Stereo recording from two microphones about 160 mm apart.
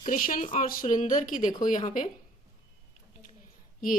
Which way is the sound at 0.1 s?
60° left (ahead or behind).